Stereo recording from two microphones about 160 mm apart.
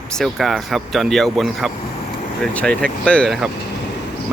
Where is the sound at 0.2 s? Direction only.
Centre (ahead or behind).